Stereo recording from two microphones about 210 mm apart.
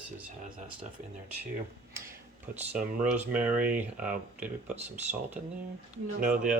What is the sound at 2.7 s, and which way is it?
Speech, 10° right (ahead or behind).